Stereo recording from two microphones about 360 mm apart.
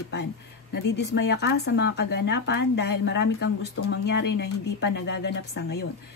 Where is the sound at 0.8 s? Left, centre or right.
Left.